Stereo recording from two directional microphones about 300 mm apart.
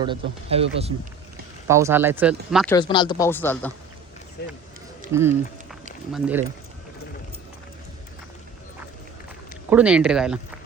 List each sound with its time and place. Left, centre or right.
0.0 s speech: centre
1.6 s speech: centre
2.7 s speech: centre
4.4 s speech: left
5.1 s speech: centre
9.6 s speech: centre